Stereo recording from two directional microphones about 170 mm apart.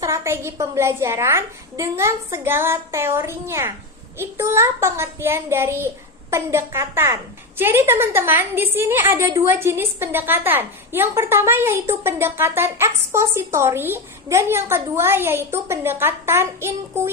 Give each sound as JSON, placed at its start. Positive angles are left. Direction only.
{"t": 0.0, "sound": "a woman's voice", "side_deg": -15}